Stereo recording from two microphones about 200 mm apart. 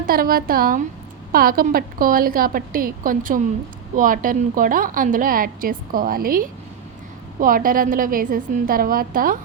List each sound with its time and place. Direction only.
0.0 s a woman's voice: 45° right (ahead or behind)